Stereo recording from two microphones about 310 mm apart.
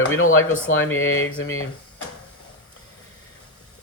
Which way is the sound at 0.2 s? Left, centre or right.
Left.